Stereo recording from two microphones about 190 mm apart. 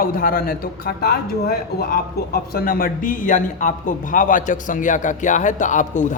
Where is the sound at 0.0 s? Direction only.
50° left (ahead or behind).